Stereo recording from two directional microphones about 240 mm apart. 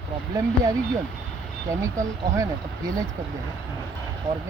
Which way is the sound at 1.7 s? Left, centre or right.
Centre.